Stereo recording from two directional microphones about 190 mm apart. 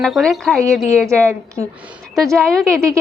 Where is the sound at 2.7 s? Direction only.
15° right (ahead or behind).